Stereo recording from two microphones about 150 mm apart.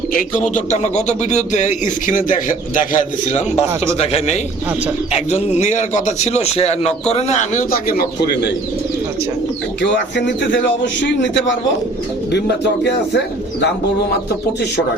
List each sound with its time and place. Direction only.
0.1 s a man's voice: 60° left (ahead or behind); by 4.4 s 40° left (ahead or behind)
5.5 s a man's voice: 55° left (ahead or behind)
7.7 s speech: 85° left